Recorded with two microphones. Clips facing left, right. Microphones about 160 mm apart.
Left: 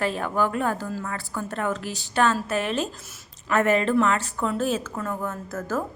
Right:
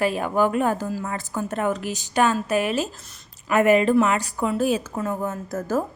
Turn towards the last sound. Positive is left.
turn(degrees=-15)  # may be behind; listen again after turning